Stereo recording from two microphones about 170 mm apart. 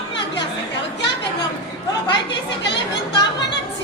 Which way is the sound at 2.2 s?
90° left.